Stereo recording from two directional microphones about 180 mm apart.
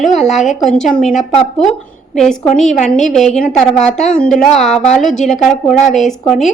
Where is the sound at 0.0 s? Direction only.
Centre (ahead or behind).